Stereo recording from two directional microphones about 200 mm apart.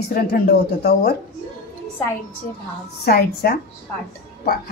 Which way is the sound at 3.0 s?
50° left (ahead or behind).